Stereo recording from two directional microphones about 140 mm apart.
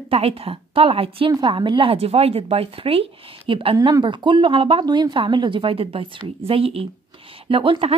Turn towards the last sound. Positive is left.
turn(degrees=-40)  # may be behind; listen again after turning